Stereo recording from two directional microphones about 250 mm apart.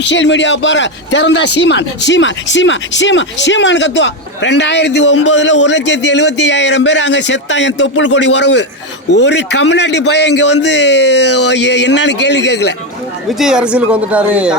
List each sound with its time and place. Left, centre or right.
0.0 s speech: left
13.4 s speech: centre